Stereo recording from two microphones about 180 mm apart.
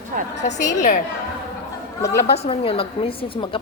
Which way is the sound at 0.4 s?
45° left (ahead or behind).